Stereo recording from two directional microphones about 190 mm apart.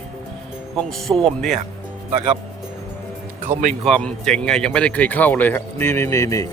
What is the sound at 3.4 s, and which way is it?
Speech, 40° right (ahead or behind).